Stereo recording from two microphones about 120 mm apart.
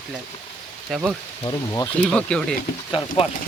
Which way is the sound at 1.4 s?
30° left (ahead or behind).